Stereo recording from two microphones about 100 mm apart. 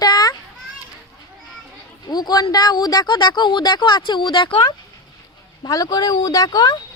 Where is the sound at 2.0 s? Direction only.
45° left (ahead or behind).